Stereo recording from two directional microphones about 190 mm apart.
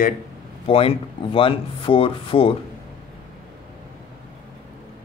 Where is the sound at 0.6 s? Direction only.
30° left (ahead or behind).